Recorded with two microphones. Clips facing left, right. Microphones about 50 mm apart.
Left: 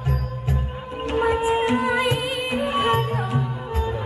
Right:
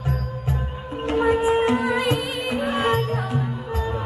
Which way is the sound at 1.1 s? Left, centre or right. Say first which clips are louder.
Right 1 dB; left.